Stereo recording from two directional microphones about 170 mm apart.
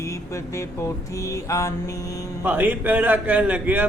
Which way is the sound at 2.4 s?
10° right (ahead or behind).